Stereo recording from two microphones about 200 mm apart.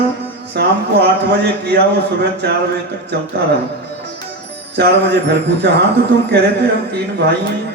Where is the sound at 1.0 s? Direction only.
55° right (ahead or behind).